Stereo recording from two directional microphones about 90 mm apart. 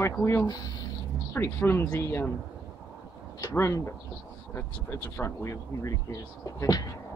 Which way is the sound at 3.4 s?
30° left (ahead or behind).